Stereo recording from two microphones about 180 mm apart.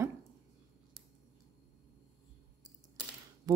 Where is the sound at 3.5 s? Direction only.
20° right (ahead or behind).